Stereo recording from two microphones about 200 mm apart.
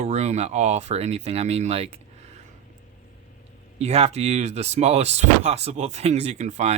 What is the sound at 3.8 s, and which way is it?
Speech, 30° right (ahead or behind).